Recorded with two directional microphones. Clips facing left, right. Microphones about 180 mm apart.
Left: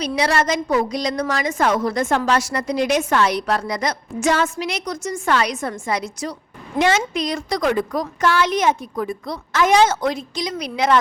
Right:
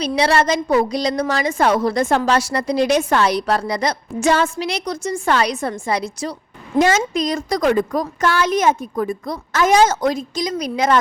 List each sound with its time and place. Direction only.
0.0 s a woman's voice: 30° right (ahead or behind)
6.7 s a woman's voice: 45° right (ahead or behind)